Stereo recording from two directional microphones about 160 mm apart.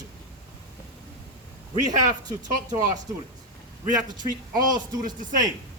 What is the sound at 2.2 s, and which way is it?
Speech, 25° right (ahead or behind).